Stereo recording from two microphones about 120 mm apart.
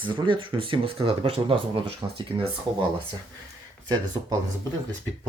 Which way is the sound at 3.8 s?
35° right (ahead or behind).